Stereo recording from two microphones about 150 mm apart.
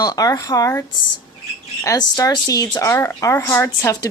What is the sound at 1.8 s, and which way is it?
A woman's voice, 25° left (ahead or behind).